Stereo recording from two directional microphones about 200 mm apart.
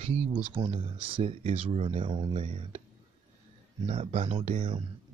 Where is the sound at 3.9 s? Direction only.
30° right (ahead or behind).